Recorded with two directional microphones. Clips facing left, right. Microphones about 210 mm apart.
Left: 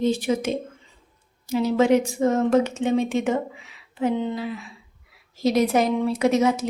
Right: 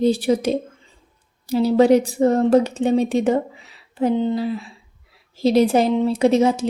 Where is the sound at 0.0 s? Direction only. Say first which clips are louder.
Right 4 dB; 35° right (ahead or behind).